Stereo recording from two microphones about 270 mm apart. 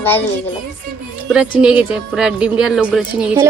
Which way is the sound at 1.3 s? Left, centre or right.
Centre.